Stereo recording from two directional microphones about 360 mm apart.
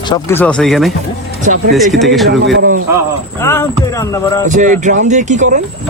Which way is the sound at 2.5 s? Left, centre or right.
Right.